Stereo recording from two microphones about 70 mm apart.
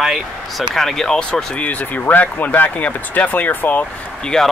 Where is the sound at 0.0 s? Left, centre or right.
Centre; by 3.8 s left.